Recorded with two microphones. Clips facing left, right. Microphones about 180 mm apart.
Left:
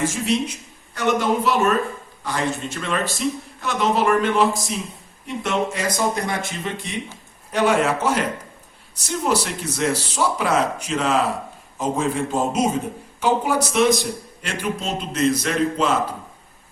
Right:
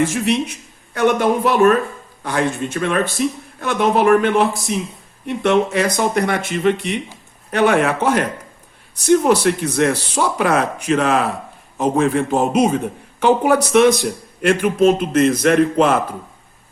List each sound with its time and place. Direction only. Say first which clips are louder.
0.0 s speech: right 4 dB; 65° right (ahead or behind)